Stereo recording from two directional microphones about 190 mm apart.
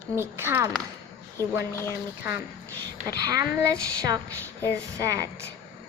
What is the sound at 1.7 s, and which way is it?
Speech, 15° left (ahead or behind).